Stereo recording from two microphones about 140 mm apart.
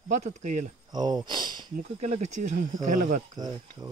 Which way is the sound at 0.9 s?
30° right (ahead or behind).